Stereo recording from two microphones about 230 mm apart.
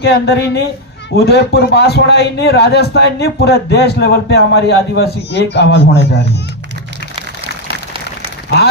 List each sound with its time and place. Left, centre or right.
0.0 s speech: left